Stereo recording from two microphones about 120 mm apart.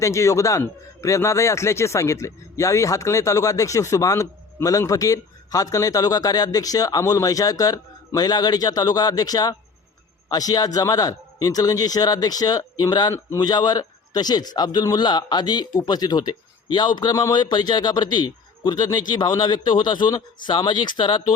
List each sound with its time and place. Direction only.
0.0 s a man's voice: 25° left (ahead or behind)